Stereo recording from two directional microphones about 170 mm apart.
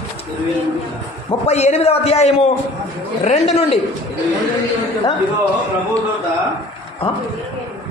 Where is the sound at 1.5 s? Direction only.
40° left (ahead or behind).